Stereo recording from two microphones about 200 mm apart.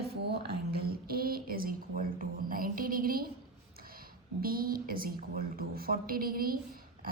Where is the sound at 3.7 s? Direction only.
45° right (ahead or behind).